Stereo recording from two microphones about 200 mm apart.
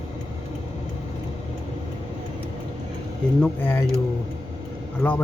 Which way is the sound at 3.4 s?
10° left (ahead or behind).